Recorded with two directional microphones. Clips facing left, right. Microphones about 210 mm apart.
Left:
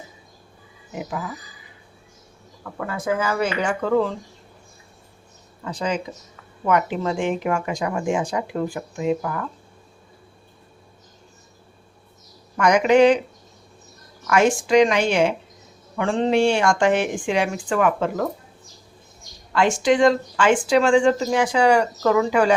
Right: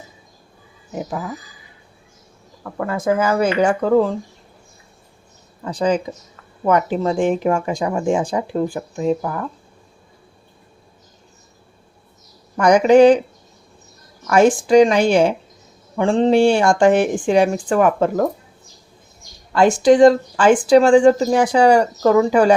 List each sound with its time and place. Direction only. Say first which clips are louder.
2.7 s speech: right 5 dB; 45° right (ahead or behind)
5.6 s speech: right 7 dB; 35° right (ahead or behind)
12.5 s speech: right 5 dB; 35° right (ahead or behind)
14.3 s speech: right 5 dB; 35° right (ahead or behind)
19.5 s speech: right 6 dB; 35° right (ahead or behind)